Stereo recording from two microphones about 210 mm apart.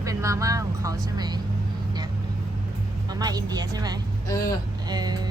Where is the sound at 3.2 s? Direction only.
20° right (ahead or behind).